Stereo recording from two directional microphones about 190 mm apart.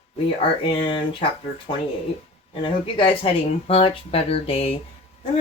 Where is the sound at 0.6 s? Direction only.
25° left (ahead or behind).